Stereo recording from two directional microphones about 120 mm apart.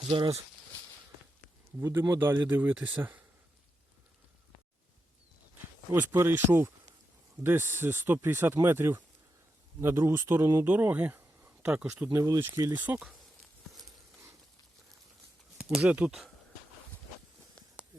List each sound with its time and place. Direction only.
0.1 s speech: 45° right (ahead or behind)
1.8 s speech: 20° right (ahead or behind)
5.9 s speech: 15° right (ahead or behind)
12.1 s speech: 30° right (ahead or behind)
12.7 s speech: 15° right (ahead or behind)
13.8 s a sound: 25° right (ahead or behind)
15.5 s speech: 5° right (ahead or behind)